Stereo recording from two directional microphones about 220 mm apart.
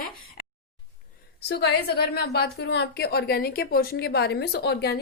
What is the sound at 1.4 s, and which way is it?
A woman's voice, 50° left (ahead or behind).